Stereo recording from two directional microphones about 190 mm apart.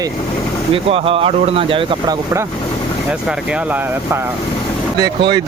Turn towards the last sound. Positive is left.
turn(degrees=-25)  # may be behind; listen again after turning